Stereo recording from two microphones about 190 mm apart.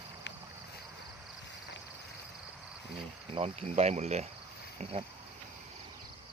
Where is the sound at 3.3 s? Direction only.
35° right (ahead or behind).